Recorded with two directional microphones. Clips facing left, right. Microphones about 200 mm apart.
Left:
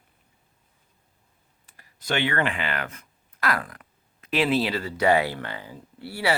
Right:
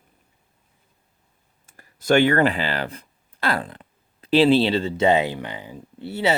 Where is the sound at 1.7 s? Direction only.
45° right (ahead or behind).